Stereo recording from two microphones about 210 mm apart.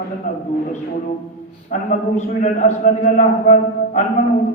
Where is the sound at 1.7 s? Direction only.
35° left (ahead or behind).